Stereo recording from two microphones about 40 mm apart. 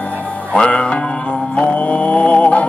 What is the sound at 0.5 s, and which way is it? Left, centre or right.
Music, left.